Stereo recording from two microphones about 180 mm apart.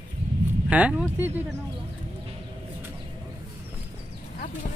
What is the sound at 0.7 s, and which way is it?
Speech, 5° right (ahead or behind).